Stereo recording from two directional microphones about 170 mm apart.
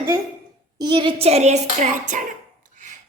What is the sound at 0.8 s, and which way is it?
Clapping, 25° right (ahead or behind).